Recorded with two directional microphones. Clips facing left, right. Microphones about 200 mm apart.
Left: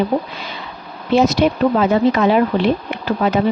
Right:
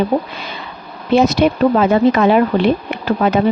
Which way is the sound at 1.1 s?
55° right (ahead or behind).